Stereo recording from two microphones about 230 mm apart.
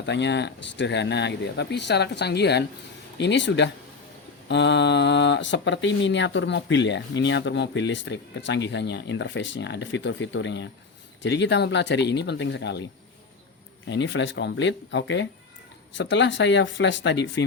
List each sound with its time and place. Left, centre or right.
0.0 s speech: left
13.8 s speech: left